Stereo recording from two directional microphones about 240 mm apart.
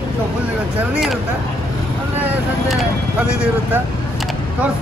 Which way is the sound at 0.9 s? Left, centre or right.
Centre.